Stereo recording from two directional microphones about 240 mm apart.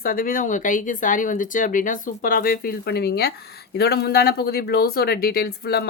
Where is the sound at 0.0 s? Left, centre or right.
Left.